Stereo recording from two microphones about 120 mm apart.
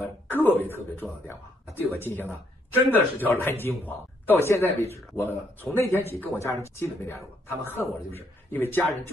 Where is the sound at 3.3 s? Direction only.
20° left (ahead or behind).